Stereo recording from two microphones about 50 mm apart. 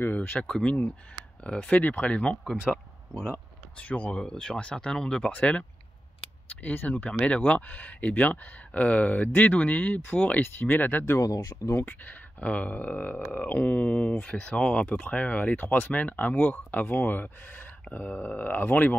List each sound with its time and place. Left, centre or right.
0.1 s speech: left
0.4 s speech: centre
1.8 s speech: left
4.2 s speech: centre
5.3 s speech: left
11.1 s speech: left
11.8 s speech: left